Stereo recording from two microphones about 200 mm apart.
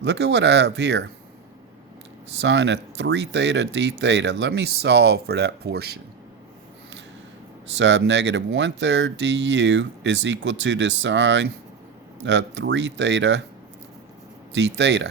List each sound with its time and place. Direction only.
0.0 s speech: 60° right (ahead or behind)
2.4 s speech: 60° right (ahead or behind)
7.7 s speech: 65° right (ahead or behind)
14.5 s speech: 60° right (ahead or behind)